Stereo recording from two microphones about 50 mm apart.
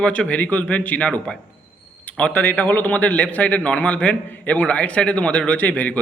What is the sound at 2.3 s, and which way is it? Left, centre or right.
A man's voice, left.